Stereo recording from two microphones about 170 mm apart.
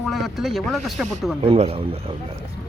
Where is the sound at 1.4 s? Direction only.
35° right (ahead or behind).